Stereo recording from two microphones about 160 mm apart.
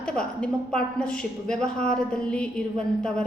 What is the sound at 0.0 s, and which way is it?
A woman's voice, 5° left (ahead or behind).